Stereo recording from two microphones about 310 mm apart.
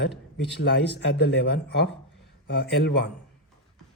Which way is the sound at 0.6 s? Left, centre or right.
Left.